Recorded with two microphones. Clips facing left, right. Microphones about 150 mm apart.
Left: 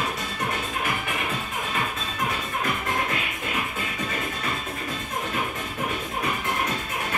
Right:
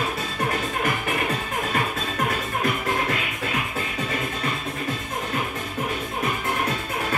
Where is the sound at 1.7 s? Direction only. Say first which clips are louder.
Right 4 dB; 60° right (ahead or behind).